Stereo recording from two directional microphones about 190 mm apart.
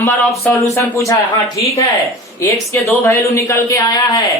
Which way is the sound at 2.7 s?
15° left (ahead or behind).